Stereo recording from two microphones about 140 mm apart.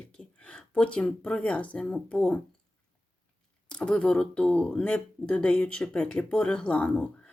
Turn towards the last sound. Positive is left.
turn(degrees=10)  # may be behind; listen again after turning